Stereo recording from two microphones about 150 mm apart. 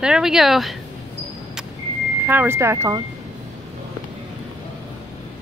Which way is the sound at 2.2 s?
15° right (ahead or behind).